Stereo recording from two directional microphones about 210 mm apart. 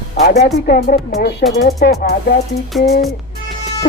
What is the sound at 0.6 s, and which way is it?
Speech, 45° left (ahead or behind).